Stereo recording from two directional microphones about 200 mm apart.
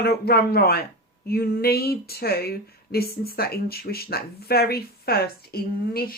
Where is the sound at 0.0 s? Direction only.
50° left (ahead or behind).